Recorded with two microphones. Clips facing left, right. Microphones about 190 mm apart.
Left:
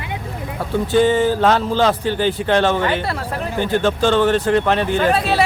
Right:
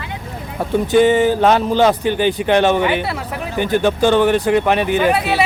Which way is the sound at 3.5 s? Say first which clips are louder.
Right 2 dB; 15° right (ahead or behind).